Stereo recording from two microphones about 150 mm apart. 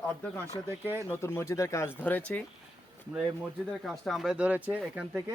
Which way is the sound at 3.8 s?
Centre (ahead or behind).